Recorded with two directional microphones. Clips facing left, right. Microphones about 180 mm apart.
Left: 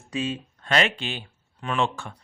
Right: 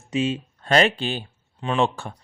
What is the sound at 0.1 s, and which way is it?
Speech, 25° right (ahead or behind).